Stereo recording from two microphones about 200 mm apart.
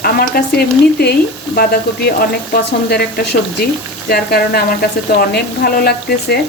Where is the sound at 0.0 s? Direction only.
50° left (ahead or behind).